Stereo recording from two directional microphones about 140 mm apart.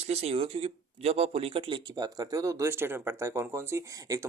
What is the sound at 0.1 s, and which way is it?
Speech, 45° right (ahead or behind).